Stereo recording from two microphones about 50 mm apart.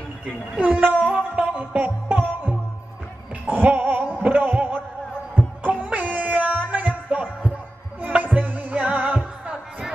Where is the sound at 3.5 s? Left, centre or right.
Right.